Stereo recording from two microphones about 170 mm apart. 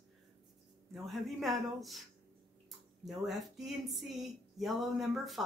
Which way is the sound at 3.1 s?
Centre (ahead or behind).